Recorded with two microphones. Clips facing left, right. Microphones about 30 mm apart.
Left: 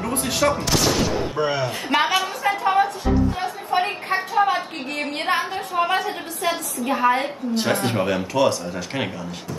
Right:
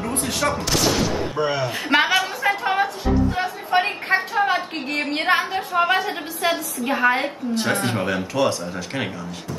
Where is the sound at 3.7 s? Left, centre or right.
Right.